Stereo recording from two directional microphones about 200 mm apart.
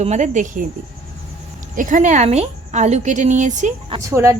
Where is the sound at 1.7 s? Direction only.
40° right (ahead or behind).